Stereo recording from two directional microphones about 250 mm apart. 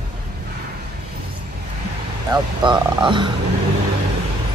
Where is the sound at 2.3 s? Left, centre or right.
Centre.